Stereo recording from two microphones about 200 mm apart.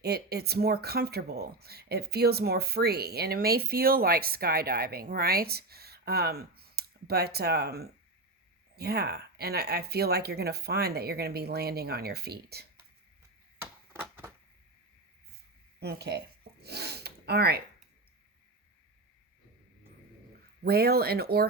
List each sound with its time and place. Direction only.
0.0 s speech: 55° right (ahead or behind)
13.9 s a sound: 10° right (ahead or behind)
15.8 s gasp: 55° right (ahead or behind)
20.7 s speech: 50° right (ahead or behind)